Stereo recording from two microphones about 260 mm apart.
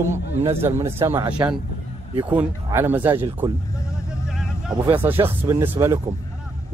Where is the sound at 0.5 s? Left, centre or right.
Centre.